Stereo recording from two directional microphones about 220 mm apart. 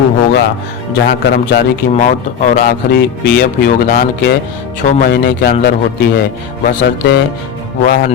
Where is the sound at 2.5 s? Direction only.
40° left (ahead or behind).